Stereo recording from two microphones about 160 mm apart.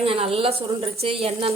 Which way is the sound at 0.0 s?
35° right (ahead or behind).